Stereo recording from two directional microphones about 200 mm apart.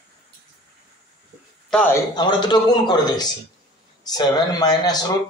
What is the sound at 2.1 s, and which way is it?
Speech, 20° left (ahead or behind).